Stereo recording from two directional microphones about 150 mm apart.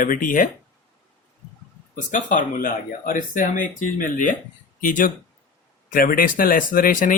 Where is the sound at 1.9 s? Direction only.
60° left (ahead or behind).